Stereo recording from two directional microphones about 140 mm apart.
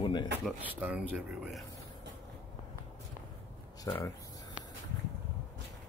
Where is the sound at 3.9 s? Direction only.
20° left (ahead or behind).